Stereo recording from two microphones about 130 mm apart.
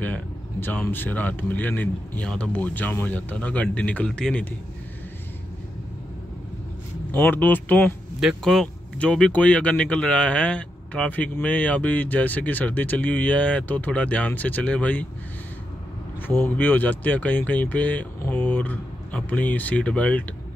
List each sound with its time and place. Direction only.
0.0 s speech: 15° left (ahead or behind)
7.1 s speech: 15° left (ahead or behind)
8.2 s speech: centre (ahead or behind)
16.3 s speech: 15° left (ahead or behind)